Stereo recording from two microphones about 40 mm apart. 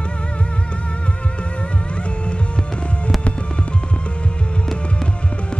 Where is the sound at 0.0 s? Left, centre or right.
Left.